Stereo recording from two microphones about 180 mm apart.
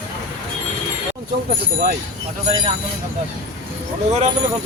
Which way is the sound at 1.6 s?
60° right (ahead or behind).